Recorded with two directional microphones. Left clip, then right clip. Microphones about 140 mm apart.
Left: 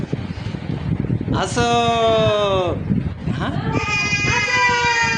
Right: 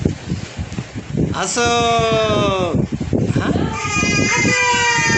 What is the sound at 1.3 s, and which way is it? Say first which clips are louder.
Speech: right 1 dB; 5° left (ahead or behind).